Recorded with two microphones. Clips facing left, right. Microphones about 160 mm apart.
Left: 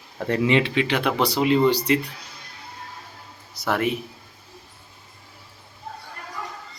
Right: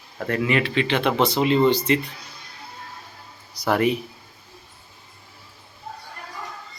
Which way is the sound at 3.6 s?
Centre (ahead or behind).